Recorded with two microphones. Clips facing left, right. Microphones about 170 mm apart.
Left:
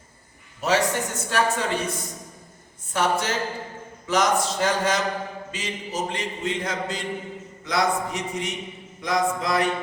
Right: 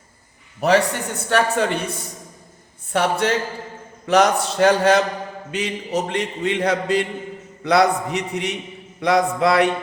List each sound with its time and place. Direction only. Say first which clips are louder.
0.6 s speech: right 5 dB; 60° right (ahead or behind)
2.9 s a man's voice: right 4 dB; 65° right (ahead or behind)